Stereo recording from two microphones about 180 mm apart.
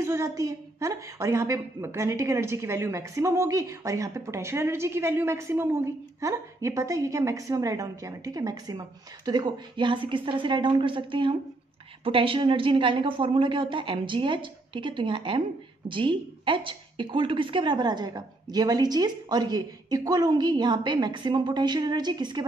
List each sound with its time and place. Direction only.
0.0 s a woman's voice: 15° right (ahead or behind)